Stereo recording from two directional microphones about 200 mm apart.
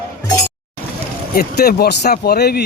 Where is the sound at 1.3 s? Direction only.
50° left (ahead or behind).